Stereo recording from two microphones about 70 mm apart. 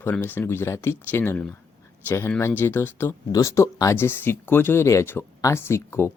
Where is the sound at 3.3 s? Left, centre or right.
Left.